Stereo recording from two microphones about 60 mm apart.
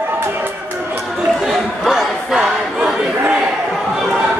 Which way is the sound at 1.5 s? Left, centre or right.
Centre.